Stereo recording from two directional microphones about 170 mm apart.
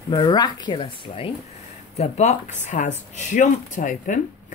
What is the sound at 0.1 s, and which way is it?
Speech, 25° left (ahead or behind).